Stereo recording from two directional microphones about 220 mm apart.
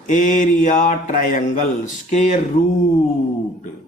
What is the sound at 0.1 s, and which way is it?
Speech, 35° left (ahead or behind).